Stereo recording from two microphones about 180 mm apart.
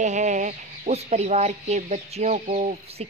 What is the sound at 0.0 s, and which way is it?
Speech, 40° right (ahead or behind).